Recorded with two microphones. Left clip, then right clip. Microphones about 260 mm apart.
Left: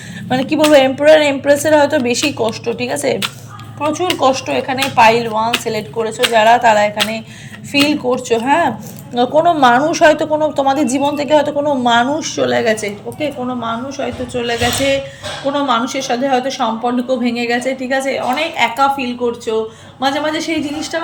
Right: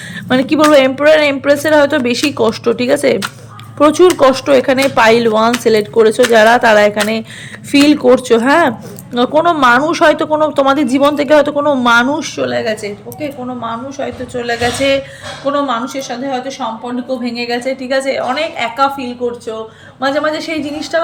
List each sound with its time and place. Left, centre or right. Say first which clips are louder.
0.3 s a woman's voice: right 2 dB; centre